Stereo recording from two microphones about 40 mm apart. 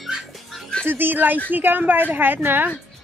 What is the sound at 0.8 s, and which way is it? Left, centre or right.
A woman's voice, right.